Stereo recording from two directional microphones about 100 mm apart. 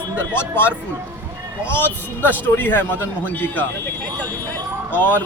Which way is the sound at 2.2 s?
20° left (ahead or behind).